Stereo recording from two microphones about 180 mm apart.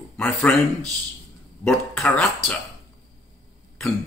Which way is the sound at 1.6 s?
10° left (ahead or behind).